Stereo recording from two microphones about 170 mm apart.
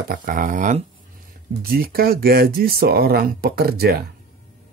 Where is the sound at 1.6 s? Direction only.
60° right (ahead or behind).